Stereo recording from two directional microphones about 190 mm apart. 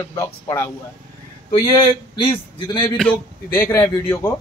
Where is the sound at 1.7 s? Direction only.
25° left (ahead or behind).